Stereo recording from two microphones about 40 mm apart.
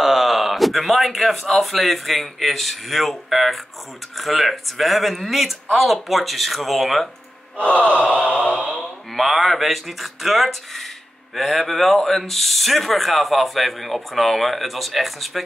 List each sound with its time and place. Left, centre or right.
0.0 s speech: centre
7.5 s gasp: left
8.0 s a sound: right
8.3 s gasp: left
9.1 s speech: centre